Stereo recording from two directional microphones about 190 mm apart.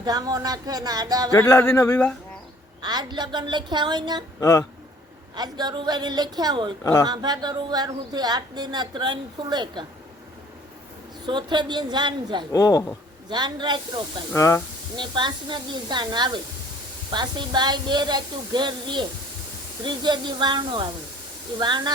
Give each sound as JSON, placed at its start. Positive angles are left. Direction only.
{"t": 0.0, "sound": "a woman's voice", "side_deg": -20}
{"t": 1.3, "sound": "speech", "side_deg": 15}
{"t": 2.8, "sound": "a woman's voice", "side_deg": -20}
{"t": 4.4, "sound": "speech", "side_deg": 15}
{"t": 5.3, "sound": "a woman's voice", "side_deg": -20}
{"t": 11.3, "sound": "a woman's voice", "side_deg": -25}
{"t": 12.5, "sound": "speech", "side_deg": 20}
{"t": 13.3, "sound": "a woman's voice", "side_deg": -25}
{"t": 14.3, "sound": "speech", "side_deg": 15}
{"t": 14.9, "sound": "a woman's voice", "side_deg": -25}